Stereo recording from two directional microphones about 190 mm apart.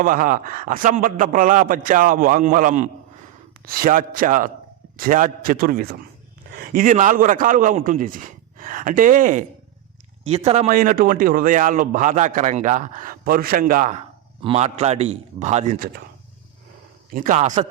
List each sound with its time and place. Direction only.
0.0 s a man's voice: 45° right (ahead or behind)
10.2 s a man's voice: 35° right (ahead or behind)
14.4 s a man's voice: 35° right (ahead or behind)
17.1 s a man's voice: 45° right (ahead or behind)